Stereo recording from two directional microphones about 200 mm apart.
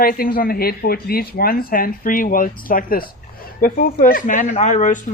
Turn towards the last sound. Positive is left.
turn(degrees=40)  # may be behind; listen again after turning